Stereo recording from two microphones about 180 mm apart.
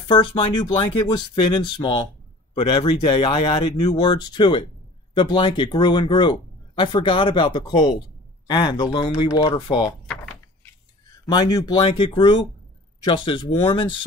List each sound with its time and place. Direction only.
0.1 s speech: 25° left (ahead or behind)
11.2 s speech: 25° left (ahead or behind)